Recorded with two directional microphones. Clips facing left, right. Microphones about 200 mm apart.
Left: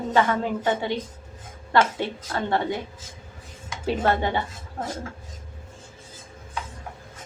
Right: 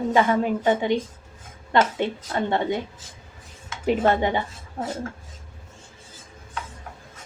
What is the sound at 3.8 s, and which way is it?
Speech, 15° right (ahead or behind).